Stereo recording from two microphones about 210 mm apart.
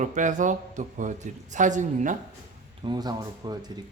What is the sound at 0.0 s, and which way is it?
A man's voice, 35° right (ahead or behind).